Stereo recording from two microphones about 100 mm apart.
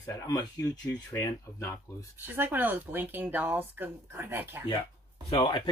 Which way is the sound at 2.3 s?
20° right (ahead or behind).